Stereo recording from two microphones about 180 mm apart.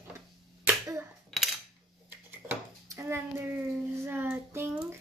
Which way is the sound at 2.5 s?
15° right (ahead or behind).